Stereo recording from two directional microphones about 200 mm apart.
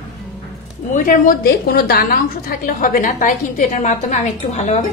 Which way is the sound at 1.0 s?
45° left (ahead or behind).